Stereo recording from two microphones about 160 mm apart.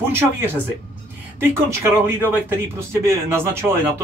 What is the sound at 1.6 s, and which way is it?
Speech, 15° right (ahead or behind).